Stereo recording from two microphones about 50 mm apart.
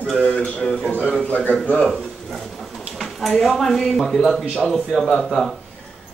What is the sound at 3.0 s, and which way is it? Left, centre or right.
Speech, centre.